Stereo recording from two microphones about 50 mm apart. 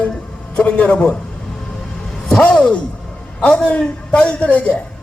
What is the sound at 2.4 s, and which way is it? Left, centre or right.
Speech, centre.